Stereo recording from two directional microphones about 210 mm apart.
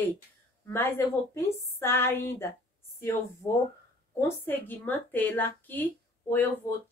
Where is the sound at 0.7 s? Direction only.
10° left (ahead or behind).